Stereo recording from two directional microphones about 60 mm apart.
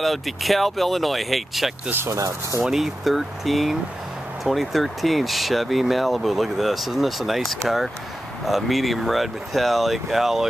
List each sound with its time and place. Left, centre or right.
0.0 s speech: centre
1.9 s speech: right
2.1 s speech: right
2.6 s speech: centre